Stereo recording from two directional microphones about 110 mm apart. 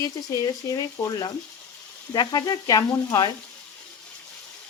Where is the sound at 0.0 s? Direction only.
35° left (ahead or behind).